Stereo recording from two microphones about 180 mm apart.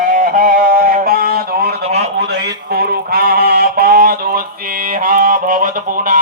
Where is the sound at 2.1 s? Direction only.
65° right (ahead or behind).